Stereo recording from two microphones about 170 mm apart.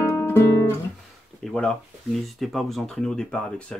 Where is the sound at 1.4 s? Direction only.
Centre (ahead or behind).